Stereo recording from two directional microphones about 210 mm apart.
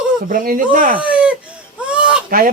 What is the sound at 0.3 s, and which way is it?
Speech, 40° right (ahead or behind).